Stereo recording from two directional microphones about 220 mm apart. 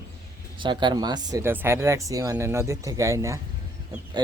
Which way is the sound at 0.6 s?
20° right (ahead or behind).